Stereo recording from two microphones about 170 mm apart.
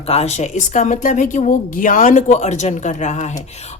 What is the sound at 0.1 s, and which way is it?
Speech, 40° left (ahead or behind).